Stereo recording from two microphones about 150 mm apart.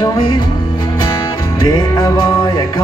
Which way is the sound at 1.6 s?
25° left (ahead or behind).